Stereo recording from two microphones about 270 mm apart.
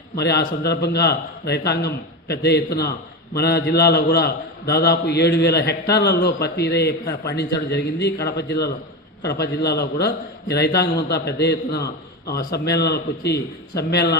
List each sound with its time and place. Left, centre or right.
0.2 s a man's voice: left